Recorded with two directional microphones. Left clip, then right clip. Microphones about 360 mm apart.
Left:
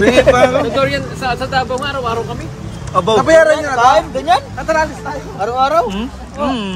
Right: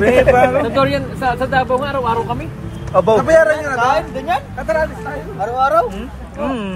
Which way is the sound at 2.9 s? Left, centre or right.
Centre.